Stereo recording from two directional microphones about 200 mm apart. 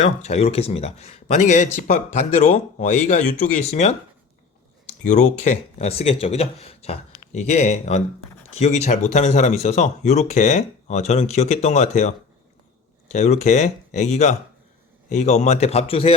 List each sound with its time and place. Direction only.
0.0 s speech: 35° left (ahead or behind)
5.0 s speech: 35° left (ahead or behind)
13.1 s speech: 35° left (ahead or behind)